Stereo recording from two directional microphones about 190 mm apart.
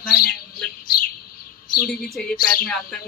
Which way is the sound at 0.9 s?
50° left (ahead or behind).